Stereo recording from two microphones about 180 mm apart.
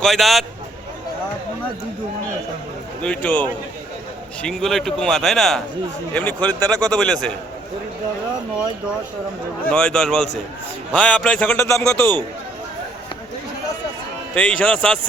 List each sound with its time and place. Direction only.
0.0 s speech: centre (ahead or behind)
3.0 s a man's voice: 5° left (ahead or behind)
4.4 s speech: centre (ahead or behind)
9.6 s a man's voice: 5° left (ahead or behind)
14.3 s a man's voice: 5° left (ahead or behind)